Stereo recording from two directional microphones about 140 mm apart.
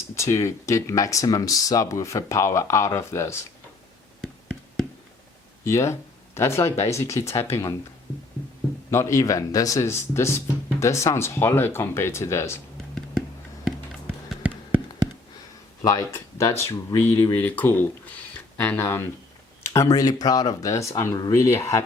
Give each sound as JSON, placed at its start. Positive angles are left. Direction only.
{"t": 0.2, "sound": "speech", "side_deg": 20}
{"t": 4.2, "sound": "a sound", "side_deg": 0}
{"t": 5.6, "sound": "speech", "side_deg": 20}
{"t": 8.9, "sound": "speech", "side_deg": 20}
{"t": 12.7, "sound": "whispering", "side_deg": 5}
{"t": 14.3, "sound": "tap", "side_deg": -10}
{"t": 15.9, "sound": "speech", "side_deg": 25}